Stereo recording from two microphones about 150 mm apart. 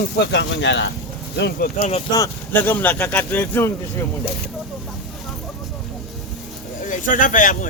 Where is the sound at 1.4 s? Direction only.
85° left.